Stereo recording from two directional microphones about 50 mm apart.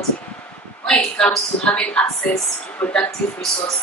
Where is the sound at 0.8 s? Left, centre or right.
Centre.